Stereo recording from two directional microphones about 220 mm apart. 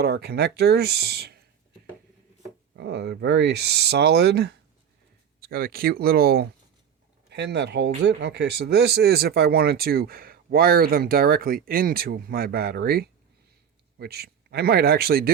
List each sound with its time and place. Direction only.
0.0 s speech: 45° right (ahead or behind)
2.7 s speech: 50° right (ahead or behind)